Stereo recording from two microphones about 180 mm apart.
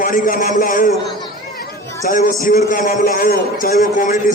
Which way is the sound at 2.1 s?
45° left (ahead or behind).